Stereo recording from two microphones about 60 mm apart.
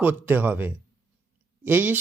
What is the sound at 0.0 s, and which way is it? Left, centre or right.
Speech, right.